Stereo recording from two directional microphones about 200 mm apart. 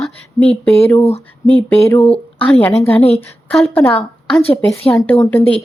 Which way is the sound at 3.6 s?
10° left (ahead or behind).